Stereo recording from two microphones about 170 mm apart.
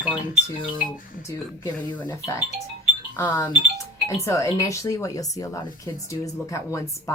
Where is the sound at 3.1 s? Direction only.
15° left (ahead or behind).